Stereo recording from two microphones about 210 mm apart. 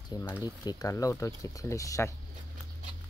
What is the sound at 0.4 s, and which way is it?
Speech, 20° left (ahead or behind).